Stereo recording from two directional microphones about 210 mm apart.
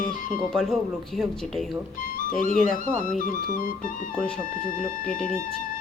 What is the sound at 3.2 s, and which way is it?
Speech, 40° left (ahead or behind).